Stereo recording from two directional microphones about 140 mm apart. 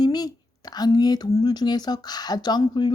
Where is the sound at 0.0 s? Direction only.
30° left (ahead or behind).